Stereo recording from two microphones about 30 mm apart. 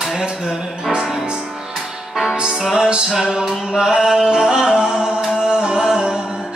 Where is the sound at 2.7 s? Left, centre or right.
Right.